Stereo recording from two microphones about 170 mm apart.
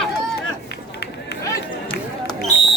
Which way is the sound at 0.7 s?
80° left.